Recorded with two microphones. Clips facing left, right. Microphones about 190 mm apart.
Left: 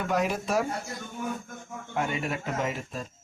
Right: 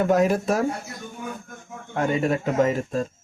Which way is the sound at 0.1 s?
45° right (ahead or behind).